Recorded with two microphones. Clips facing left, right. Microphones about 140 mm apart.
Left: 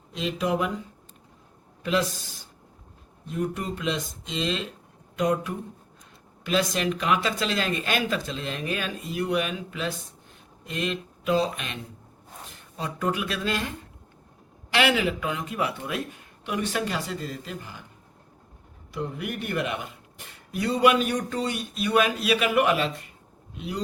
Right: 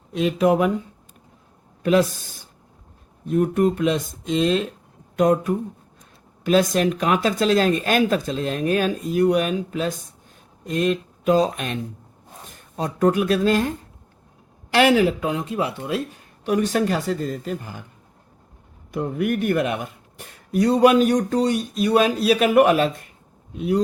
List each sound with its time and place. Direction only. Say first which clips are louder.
0.1 s speech: right 8 dB; 50° right (ahead or behind)
1.8 s speech: right 7 dB; 50° right (ahead or behind)
18.9 s speech: right 9 dB; 50° right (ahead or behind)